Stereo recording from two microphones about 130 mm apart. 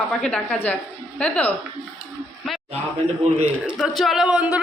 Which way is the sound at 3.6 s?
5° right (ahead or behind).